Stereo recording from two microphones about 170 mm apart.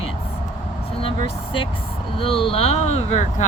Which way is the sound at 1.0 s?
35° left (ahead or behind).